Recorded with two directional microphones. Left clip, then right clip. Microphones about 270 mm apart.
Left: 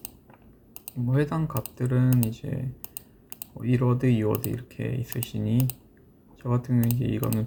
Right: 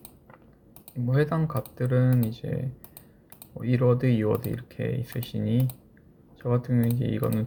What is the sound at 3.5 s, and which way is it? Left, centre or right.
Speech, centre.